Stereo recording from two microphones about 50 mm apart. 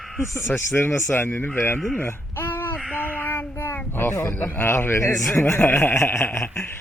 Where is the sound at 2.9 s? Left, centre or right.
Left.